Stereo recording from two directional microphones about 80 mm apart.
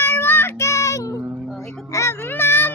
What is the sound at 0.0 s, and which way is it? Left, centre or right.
Child singing, left.